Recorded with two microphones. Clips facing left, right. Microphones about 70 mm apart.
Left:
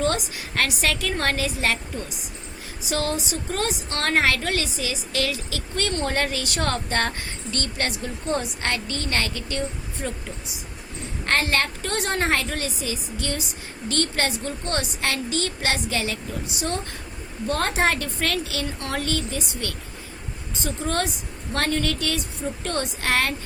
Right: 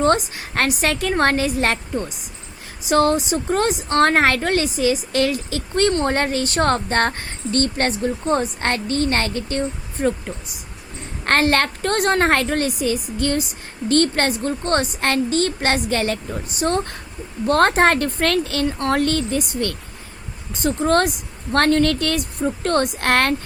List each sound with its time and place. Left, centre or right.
0.3 s a woman's voice: right
17.4 s a woman's voice: right